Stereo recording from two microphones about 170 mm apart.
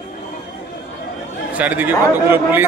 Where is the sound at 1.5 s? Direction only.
10° right (ahead or behind).